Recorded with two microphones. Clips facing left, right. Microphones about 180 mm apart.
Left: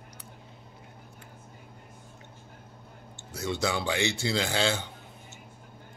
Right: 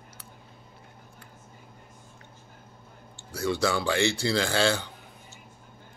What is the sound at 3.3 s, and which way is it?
A man's voice, 20° left (ahead or behind).